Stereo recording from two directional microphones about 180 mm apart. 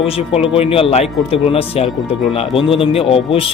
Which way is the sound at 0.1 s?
35° left (ahead or behind).